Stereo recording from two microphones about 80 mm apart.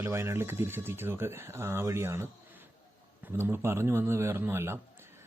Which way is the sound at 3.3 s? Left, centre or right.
Right.